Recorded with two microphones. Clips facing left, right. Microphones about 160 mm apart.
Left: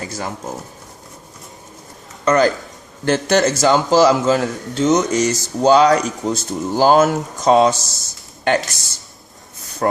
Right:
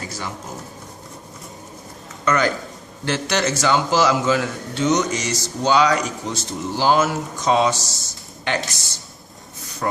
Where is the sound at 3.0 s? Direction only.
45° left (ahead or behind).